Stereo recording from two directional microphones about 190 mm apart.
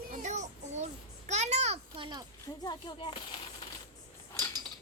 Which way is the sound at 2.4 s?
20° left (ahead or behind).